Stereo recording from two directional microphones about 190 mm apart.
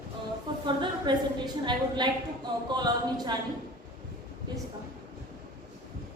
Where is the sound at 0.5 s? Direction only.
25° right (ahead or behind).